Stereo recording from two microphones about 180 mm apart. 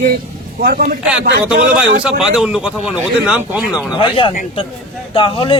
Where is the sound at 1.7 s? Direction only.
5° right (ahead or behind).